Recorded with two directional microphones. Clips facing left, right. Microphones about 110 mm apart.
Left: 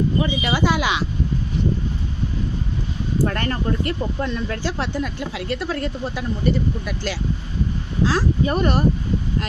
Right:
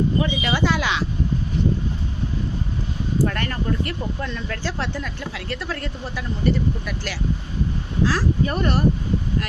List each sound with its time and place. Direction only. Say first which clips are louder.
0.2 s speech: left 1 dB; 10° left (ahead or behind)
3.2 s speech: left 2 dB; 35° left (ahead or behind)
4.3 s speech: left 3 dB; 20° left (ahead or behind)